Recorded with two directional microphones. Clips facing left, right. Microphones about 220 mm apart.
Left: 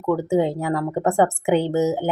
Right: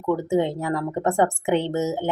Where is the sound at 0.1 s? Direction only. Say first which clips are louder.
Left 2 dB; 10° left (ahead or behind).